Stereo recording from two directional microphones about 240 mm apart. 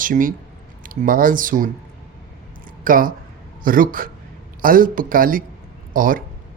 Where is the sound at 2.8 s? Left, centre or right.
Right.